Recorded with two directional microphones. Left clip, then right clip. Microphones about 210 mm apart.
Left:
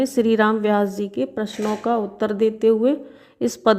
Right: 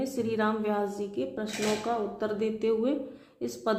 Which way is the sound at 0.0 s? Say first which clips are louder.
Left 11 dB; 35° left (ahead or behind).